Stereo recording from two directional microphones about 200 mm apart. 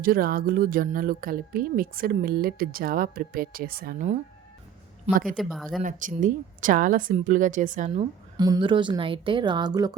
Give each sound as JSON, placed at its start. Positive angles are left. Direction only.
{"t": 0.0, "sound": "speech", "side_deg": -45}
{"t": 5.4, "sound": "speech", "side_deg": 0}
{"t": 5.8, "sound": "speech", "side_deg": -40}
{"t": 8.4, "sound": "a woman's voice", "side_deg": -20}